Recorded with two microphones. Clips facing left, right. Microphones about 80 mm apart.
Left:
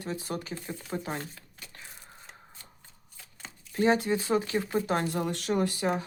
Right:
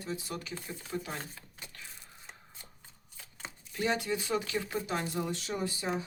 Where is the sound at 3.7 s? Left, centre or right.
Left.